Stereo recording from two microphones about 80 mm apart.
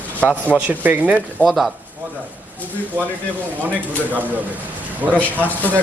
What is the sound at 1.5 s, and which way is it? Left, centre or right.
Speech, centre.